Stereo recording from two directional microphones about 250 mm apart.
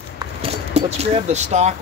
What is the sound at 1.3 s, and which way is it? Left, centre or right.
Speech, right.